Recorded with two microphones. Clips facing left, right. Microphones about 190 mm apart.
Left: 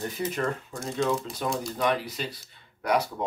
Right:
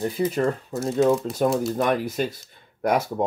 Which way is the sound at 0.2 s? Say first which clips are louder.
Right 6 dB; 35° right (ahead or behind).